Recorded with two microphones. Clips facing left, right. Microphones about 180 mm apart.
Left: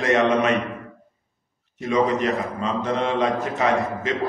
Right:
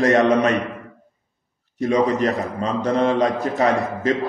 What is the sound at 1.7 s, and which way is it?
A man's voice, 35° right (ahead or behind).